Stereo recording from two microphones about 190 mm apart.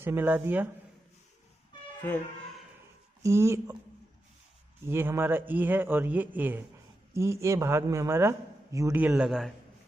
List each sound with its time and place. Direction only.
0.0 s a man's voice: 10° right (ahead or behind)
3.2 s a man's voice: 15° right (ahead or behind)
4.8 s a man's voice: 15° right (ahead or behind)